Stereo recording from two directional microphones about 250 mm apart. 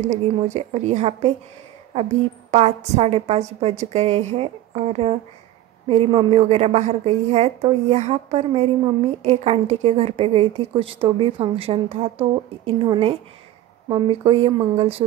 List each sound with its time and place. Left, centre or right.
0.0 s a woman's voice: right